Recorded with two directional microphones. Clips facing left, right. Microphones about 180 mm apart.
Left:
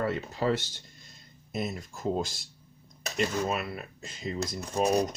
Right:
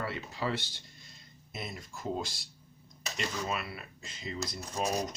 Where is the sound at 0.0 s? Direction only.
45° left (ahead or behind).